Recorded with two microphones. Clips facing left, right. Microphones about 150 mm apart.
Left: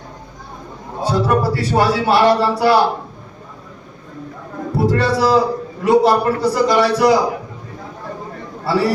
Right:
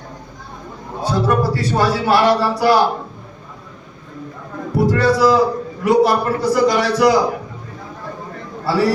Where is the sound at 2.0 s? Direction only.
25° left (ahead or behind).